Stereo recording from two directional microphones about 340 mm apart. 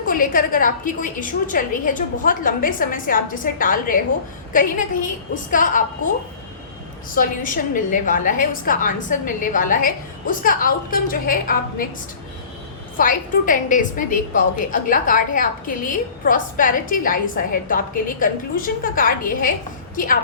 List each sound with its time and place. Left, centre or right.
0.0 s a woman's voice: left
7.2 s a woman's voice: left
13.0 s a woman's voice: left